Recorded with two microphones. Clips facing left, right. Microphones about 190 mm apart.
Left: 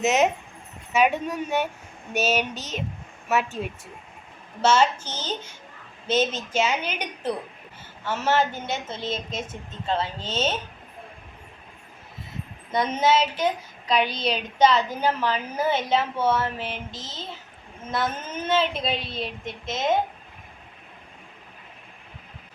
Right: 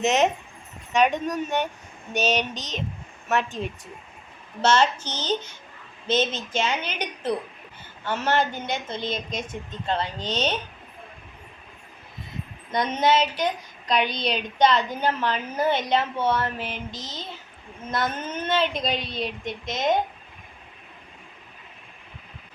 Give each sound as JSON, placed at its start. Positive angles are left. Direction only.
{"t": 0.0, "sound": "a woman's voice", "side_deg": 5}
{"t": 12.7, "sound": "a woman's voice", "side_deg": 5}